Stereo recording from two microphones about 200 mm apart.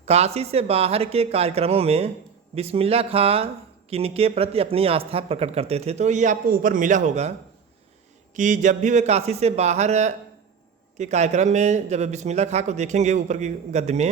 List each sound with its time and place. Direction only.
0.0 s speech: 30° right (ahead or behind)
8.4 s speech: 40° right (ahead or behind)